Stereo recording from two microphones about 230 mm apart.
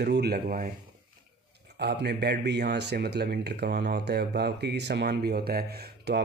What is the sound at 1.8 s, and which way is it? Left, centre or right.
Speech, right.